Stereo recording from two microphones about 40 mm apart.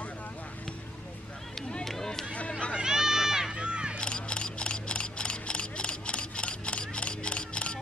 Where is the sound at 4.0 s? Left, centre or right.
Left.